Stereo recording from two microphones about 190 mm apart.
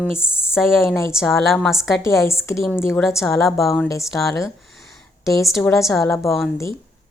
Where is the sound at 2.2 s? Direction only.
15° left (ahead or behind).